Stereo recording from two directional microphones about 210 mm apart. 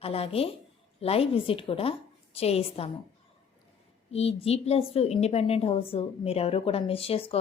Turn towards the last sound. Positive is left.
turn(degrees=25)  # may be behind; listen again after turning